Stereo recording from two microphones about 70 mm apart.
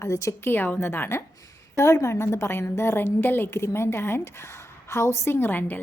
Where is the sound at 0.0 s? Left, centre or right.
Left.